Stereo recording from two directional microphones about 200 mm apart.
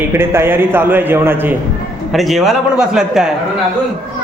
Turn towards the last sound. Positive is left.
turn(degrees=-5)  # may be behind; listen again after turning